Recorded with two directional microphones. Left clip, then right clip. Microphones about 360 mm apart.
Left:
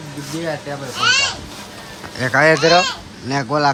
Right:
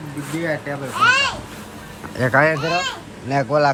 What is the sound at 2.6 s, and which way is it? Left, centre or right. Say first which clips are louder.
Speech: left 8 dB; centre.